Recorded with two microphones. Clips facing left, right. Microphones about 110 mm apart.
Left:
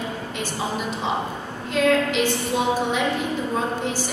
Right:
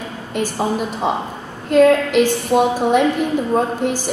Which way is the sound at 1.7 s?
50° right (ahead or behind).